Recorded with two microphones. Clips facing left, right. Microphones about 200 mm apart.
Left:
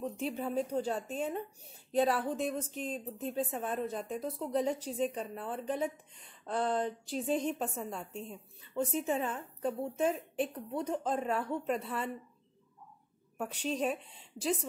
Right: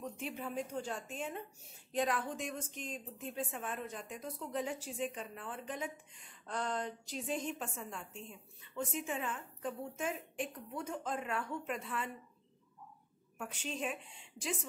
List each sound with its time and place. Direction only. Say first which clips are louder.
0.0 s a woman's voice: left 6 dB; 35° left (ahead or behind)
13.4 s a woman's voice: left 7 dB; 40° left (ahead or behind)